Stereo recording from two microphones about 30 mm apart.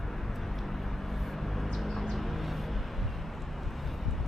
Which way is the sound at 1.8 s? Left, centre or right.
Centre.